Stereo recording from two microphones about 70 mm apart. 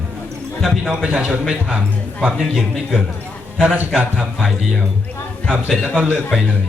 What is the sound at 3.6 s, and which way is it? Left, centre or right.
Speech, centre.